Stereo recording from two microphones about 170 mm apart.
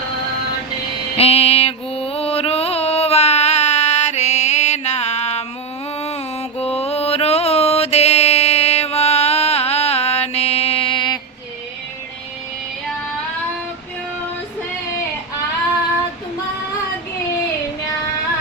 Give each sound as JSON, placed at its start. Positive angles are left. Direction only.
{"t": 1.1, "sound": "mantra", "side_deg": 35}
{"t": 6.6, "sound": "mantra", "side_deg": 35}